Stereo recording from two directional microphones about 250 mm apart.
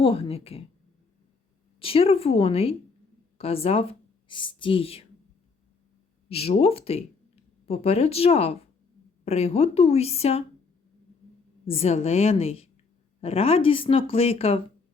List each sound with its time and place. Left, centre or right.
0.0 s speech: left
1.8 s speech: left
6.2 s speech: left
11.6 s speech: left